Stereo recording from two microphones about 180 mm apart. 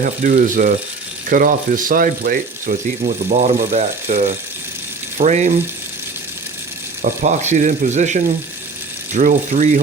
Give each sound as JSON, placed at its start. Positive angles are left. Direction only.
{"t": 0.0, "sound": "speech", "side_deg": -50}
{"t": 7.0, "sound": "speech", "side_deg": -45}